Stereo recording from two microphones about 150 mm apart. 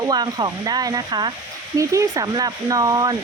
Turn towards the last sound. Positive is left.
turn(degrees=-25)  # may be behind; listen again after turning